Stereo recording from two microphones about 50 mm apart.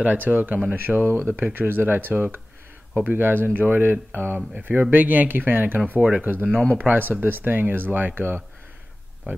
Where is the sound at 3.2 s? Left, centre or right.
Right.